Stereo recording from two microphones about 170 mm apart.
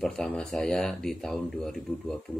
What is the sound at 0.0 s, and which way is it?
Speech, 5° left (ahead or behind).